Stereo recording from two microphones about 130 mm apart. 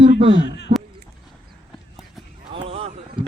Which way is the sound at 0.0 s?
45° right (ahead or behind).